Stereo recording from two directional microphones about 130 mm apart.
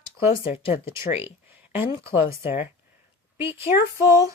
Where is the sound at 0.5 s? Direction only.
50° left (ahead or behind).